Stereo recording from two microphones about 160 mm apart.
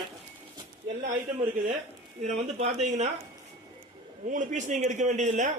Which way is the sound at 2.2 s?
40° right (ahead or behind).